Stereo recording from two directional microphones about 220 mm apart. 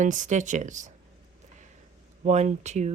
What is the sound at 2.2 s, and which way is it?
Speech, 30° right (ahead or behind).